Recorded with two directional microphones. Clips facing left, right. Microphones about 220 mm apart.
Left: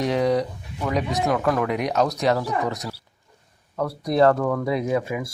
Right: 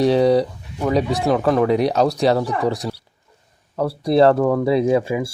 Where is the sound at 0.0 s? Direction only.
30° right (ahead or behind).